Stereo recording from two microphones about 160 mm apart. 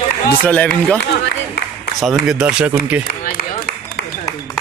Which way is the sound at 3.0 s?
75° left (ahead or behind).